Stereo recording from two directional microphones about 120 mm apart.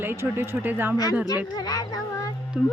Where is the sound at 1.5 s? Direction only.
30° left (ahead or behind).